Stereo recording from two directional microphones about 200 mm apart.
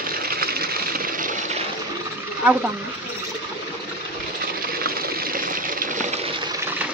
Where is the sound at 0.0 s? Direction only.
45° right (ahead or behind).